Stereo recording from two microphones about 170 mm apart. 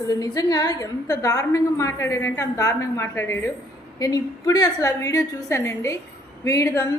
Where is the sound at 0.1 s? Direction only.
20° left (ahead or behind).